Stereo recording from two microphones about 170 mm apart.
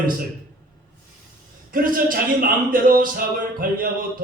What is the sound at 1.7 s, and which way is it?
A man's voice, 55° right (ahead or behind).